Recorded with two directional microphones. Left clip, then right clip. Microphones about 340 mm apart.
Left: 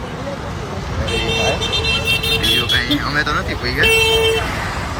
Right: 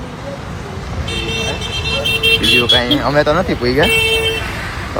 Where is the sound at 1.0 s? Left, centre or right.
Centre.